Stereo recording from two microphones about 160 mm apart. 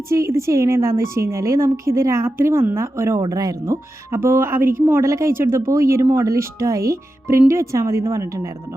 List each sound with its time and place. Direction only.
0.1 s a woman's voice: 20° right (ahead or behind)